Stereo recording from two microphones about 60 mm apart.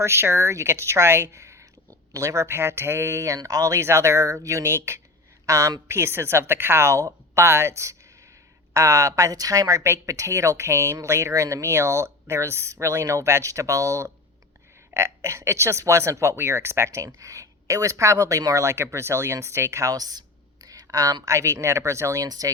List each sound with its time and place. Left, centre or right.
0.0 s speech: right
3.3 s speech: right
4.6 s speech: right
5.5 s speech: right
10.1 s speech: right
14.9 s speech: right
19.9 s speech: right
21.3 s speech: right
22.3 s speech: right